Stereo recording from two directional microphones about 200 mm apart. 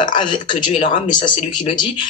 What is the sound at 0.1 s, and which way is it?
Speech, 25° left (ahead or behind).